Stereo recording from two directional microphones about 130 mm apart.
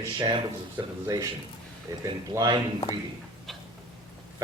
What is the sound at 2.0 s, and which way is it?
Speech, 30° right (ahead or behind).